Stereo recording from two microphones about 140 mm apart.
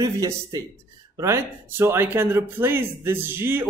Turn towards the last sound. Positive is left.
turn(degrees=-15)  # may be behind; listen again after turning